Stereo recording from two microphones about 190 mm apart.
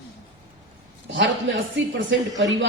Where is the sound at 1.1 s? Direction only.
75° right (ahead or behind).